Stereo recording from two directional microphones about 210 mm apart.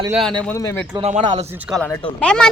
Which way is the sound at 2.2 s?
5° left (ahead or behind).